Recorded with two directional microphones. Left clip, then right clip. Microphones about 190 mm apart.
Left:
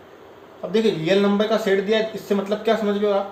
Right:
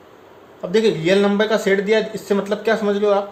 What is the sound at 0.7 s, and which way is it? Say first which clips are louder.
Speech: right 3 dB; 55° right (ahead or behind).